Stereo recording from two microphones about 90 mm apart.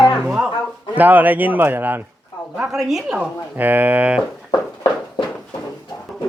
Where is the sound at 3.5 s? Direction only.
20° right (ahead or behind).